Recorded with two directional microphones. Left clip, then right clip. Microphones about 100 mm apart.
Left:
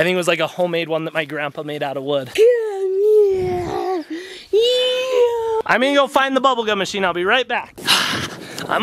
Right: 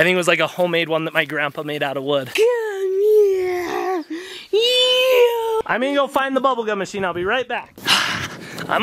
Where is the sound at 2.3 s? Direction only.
25° right (ahead or behind).